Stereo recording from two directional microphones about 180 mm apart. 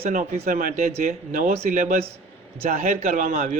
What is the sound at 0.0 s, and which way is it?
A man's voice, 40° right (ahead or behind).